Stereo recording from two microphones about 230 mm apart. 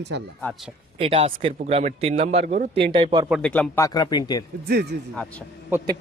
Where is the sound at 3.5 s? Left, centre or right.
Centre.